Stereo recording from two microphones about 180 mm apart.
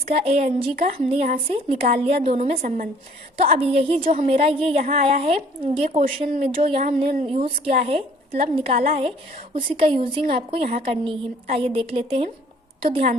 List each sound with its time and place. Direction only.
0.3 s a woman's voice: 35° right (ahead or behind)
2.6 s speech: 50° right (ahead or behind)
3.6 s a woman's voice: 30° right (ahead or behind)